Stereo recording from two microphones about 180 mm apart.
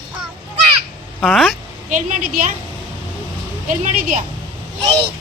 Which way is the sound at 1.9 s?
45° right (ahead or behind).